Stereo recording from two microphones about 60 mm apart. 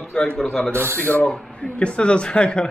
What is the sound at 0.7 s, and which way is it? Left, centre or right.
Speech, right.